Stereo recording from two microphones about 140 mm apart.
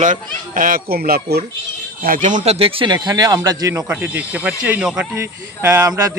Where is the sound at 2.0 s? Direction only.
75° right (ahead or behind); by 3.8 s 25° right (ahead or behind).